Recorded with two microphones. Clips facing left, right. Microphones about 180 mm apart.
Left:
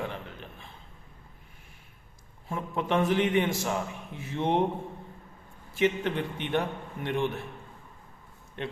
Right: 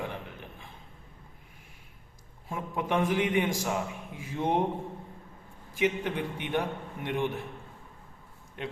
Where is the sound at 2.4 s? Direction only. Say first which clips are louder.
Left 2 dB; 15° right (ahead or behind).